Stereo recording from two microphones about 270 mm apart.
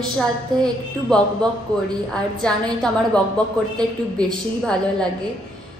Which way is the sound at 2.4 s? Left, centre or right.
Centre.